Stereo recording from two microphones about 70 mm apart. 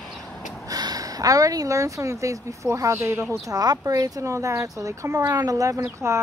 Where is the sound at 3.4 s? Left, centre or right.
Right.